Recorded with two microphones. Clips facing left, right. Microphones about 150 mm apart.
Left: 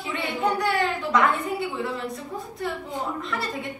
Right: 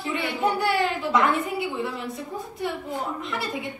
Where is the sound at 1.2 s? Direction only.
Centre (ahead or behind).